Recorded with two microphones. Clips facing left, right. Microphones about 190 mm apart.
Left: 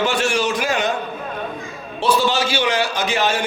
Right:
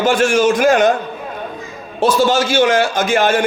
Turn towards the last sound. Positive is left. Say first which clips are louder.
# right 6 dB
turn(degrees=-50)  # may be behind; listen again after turning